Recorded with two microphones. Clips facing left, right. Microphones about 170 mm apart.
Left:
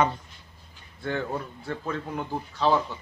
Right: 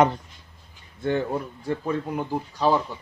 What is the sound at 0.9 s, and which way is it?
Speech, 20° right (ahead or behind).